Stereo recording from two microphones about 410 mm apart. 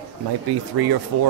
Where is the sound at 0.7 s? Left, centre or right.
Right.